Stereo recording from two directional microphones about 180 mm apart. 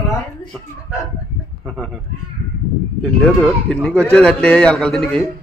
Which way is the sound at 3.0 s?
5° left (ahead or behind).